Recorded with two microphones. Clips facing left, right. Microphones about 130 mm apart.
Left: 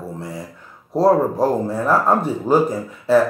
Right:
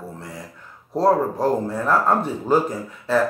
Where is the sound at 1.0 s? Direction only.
10° left (ahead or behind).